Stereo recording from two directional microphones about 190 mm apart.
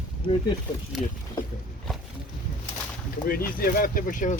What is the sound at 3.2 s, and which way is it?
Speech, 50° left (ahead or behind).